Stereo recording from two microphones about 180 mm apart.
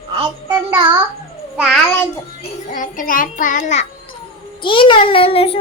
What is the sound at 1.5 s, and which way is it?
Child singing, centre (ahead or behind).